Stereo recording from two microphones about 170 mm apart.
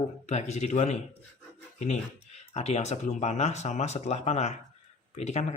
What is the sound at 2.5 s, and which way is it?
Speech, 40° left (ahead or behind).